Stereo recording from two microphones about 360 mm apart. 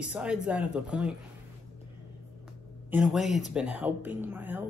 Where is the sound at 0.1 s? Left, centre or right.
Centre.